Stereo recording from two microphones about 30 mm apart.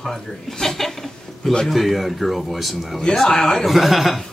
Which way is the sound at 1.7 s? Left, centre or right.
Centre.